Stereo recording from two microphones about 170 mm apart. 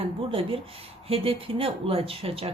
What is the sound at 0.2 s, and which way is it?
Speech, 30° right (ahead or behind).